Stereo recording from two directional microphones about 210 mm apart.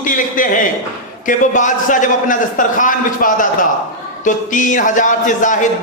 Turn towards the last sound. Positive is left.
turn(degrees=35)  # may be behind; listen again after turning